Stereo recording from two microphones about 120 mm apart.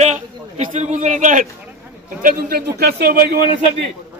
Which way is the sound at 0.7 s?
85° right.